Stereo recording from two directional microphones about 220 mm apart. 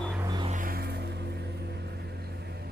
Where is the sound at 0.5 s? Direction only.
40° right (ahead or behind).